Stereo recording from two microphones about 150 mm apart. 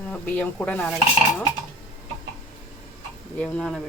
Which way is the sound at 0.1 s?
10° left (ahead or behind).